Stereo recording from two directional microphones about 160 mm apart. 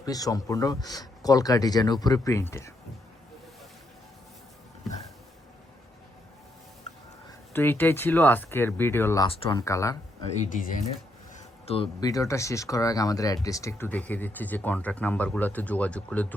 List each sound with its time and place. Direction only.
0.0 s speech: 25° left (ahead or behind)
7.5 s speech: 15° left (ahead or behind)
11.3 s a sound: 40° left (ahead or behind)
11.9 s speech: 20° left (ahead or behind)